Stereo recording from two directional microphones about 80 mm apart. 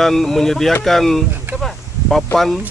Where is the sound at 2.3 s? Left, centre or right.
Centre.